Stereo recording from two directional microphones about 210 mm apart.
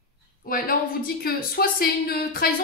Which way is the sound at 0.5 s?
45° left (ahead or behind).